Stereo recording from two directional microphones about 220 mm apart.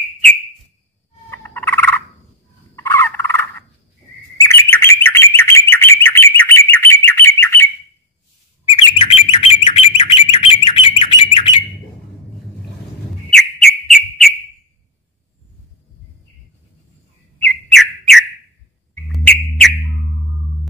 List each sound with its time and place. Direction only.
1.3 s frog: 10° left (ahead or behind)
2.7 s turkey: 10° left (ahead or behind)
4.4 s bird: 10° left (ahead or behind)
8.7 s bird: 25° left (ahead or behind)
13.3 s bird: centre (ahead or behind)
17.5 s bird: centre (ahead or behind)